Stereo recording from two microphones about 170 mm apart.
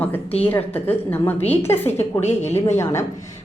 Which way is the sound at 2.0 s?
40° left (ahead or behind).